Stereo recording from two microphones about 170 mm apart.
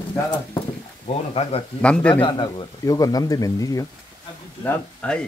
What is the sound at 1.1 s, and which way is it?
Speech, 40° left (ahead or behind).